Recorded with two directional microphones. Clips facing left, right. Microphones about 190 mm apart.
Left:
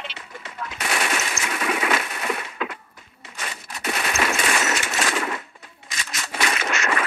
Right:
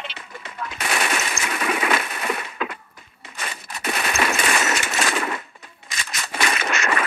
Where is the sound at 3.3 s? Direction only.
55° right (ahead or behind).